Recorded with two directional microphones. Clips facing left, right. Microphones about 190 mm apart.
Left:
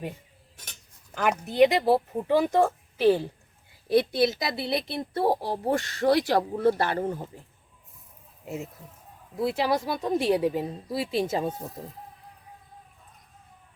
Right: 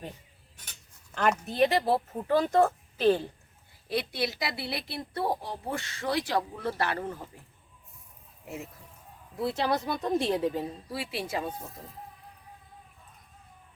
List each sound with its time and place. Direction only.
1.1 s a woman's voice: 10° left (ahead or behind)
4.1 s speech: 25° left (ahead or behind)
5.6 s speech: 40° left (ahead or behind)
6.7 s speech: 30° left (ahead or behind)
8.4 s a woman's voice: 20° left (ahead or behind)